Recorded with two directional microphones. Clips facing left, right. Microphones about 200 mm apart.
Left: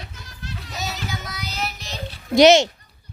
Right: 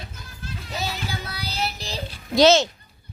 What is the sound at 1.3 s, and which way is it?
Child singing, 30° right (ahead or behind).